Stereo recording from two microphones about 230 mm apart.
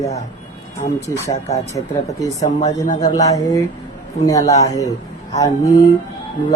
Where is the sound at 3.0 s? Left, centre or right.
Centre.